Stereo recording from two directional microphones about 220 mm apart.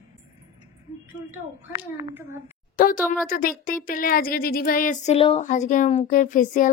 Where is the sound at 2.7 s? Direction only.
40° left (ahead or behind).